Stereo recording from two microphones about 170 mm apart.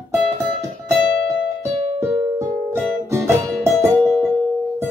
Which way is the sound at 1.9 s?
20° right (ahead or behind).